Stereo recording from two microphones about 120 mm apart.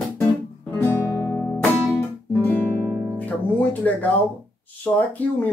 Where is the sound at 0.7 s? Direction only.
20° left (ahead or behind).